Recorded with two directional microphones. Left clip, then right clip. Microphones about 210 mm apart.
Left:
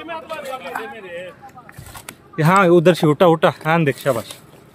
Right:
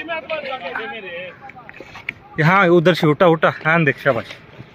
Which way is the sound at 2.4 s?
25° left (ahead or behind).